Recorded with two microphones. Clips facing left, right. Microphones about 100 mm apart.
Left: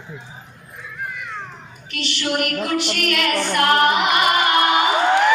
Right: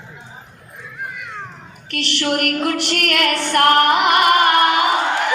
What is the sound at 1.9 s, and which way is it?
Female singing, 70° right (ahead or behind).